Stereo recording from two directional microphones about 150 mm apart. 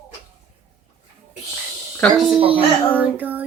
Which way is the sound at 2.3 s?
35° right (ahead or behind).